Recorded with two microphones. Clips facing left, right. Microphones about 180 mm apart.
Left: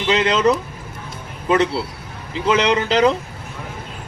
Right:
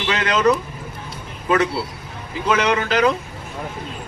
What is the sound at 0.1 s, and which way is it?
Speech, 25° left (ahead or behind).